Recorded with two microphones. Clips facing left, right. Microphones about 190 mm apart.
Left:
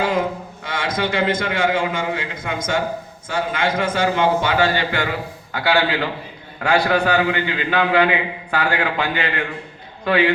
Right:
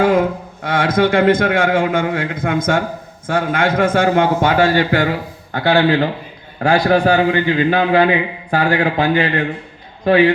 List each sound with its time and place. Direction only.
0.0 s a man's voice: 55° right (ahead or behind); by 10.3 s 40° right (ahead or behind)